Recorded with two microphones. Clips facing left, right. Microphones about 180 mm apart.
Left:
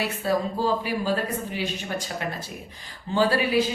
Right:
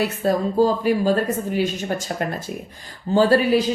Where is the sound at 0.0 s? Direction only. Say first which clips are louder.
Right 5 dB; 45° right (ahead or behind).